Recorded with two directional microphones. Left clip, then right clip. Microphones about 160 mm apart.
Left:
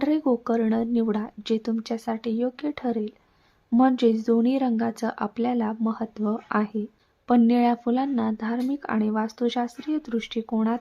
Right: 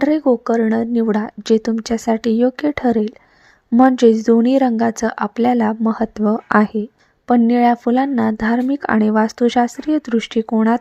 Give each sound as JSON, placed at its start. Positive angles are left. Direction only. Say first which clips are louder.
{"t": 0.0, "sound": "speech", "louder": "right 8 dB", "side_deg": -35}
{"t": 7.3, "sound": "speech", "louder": "right 7 dB", "side_deg": -30}